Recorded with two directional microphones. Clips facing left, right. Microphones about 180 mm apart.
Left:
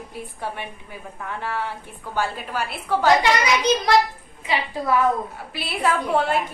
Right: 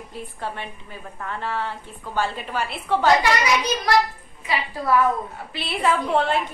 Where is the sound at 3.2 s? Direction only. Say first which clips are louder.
Left 1 dB; 20° left (ahead or behind).